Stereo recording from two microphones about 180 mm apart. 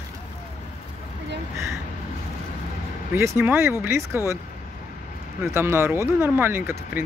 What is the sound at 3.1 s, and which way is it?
Speech, 15° right (ahead or behind).